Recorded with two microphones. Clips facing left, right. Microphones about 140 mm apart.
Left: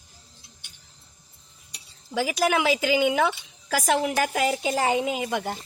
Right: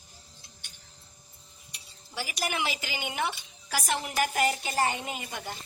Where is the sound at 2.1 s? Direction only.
90° left.